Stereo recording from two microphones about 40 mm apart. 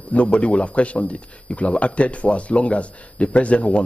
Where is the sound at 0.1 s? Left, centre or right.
Left.